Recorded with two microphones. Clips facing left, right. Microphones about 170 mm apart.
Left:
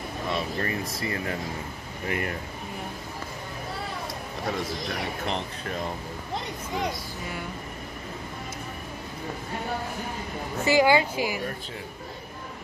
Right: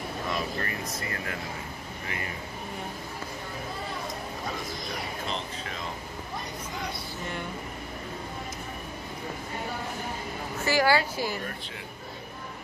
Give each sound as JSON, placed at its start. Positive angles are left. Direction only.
{"t": 0.3, "sound": "speech", "side_deg": 25}
{"t": 2.0, "sound": "speech", "side_deg": 55}
{"t": 4.8, "sound": "speech", "side_deg": 60}
{"t": 10.6, "sound": "a woman's voice", "side_deg": 20}